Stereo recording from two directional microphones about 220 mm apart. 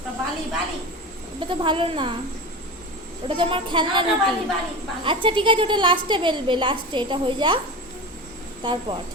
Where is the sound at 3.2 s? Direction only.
25° right (ahead or behind).